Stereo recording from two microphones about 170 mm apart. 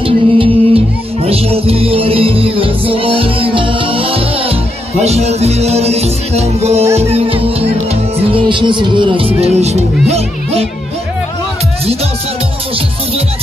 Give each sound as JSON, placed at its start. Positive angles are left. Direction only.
{"t": 0.0, "sound": "music", "side_deg": -30}